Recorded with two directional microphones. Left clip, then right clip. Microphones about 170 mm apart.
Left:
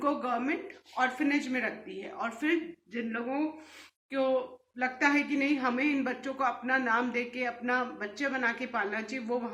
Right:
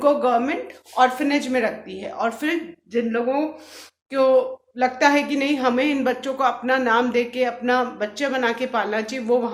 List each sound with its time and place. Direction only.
0.0 s a woman's voice: 35° right (ahead or behind)
4.8 s a woman's voice: 35° right (ahead or behind)